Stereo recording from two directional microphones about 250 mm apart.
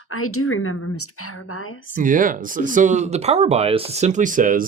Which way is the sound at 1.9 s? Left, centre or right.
Right.